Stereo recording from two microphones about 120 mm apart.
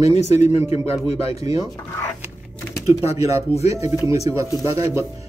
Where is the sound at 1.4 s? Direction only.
30° right (ahead or behind).